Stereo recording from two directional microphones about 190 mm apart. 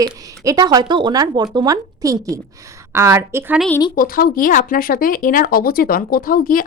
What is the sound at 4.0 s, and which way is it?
Speech, 50° left (ahead or behind).